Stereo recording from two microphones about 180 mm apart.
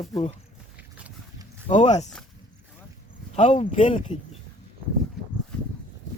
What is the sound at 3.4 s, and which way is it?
Speech, 40° left (ahead or behind).